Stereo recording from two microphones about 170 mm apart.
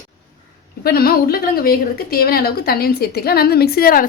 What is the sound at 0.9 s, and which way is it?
A woman's voice, 60° left (ahead or behind).